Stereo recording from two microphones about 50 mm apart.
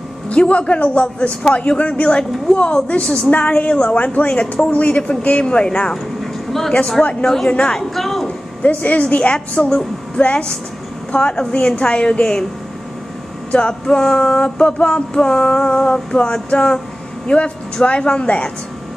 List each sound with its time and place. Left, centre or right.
0.3 s speech: left
6.2 s a sound: centre
7.0 s speech: left
7.7 s speech: centre
8.6 s a woman's voice: left
13.5 s male singing: centre
14.4 s speech: left
15.6 s male singing: centre
17.3 s speech: left